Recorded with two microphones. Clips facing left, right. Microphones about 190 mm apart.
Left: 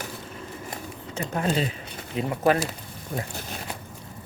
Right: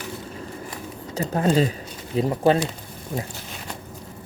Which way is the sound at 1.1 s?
35° right (ahead or behind).